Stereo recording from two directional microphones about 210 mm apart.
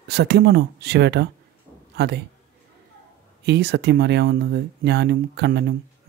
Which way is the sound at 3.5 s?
55° right (ahead or behind).